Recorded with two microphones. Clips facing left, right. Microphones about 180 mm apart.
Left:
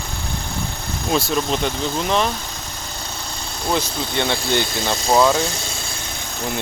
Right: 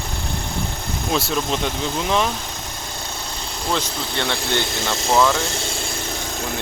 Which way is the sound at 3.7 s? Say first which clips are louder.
Left 2 dB; 10° left (ahead or behind).